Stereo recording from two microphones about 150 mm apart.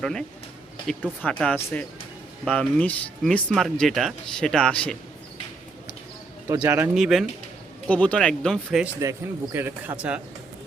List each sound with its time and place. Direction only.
0.0 s speech: 5° left (ahead or behind)
6.6 s speech: 15° right (ahead or behind)
6.9 s speech: centre (ahead or behind)
7.9 s speech: 10° left (ahead or behind)
9.0 s speech: 20° right (ahead or behind)